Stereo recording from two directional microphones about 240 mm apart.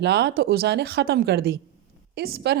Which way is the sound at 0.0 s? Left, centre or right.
Right.